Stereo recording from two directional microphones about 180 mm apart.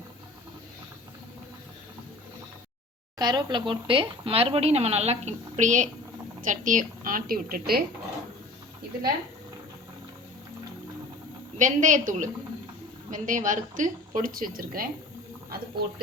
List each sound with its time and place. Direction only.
3.2 s a woman's voice: 25° right (ahead or behind); by 7.9 s 55° right (ahead or behind)
11.5 s a woman's voice: 45° right (ahead or behind)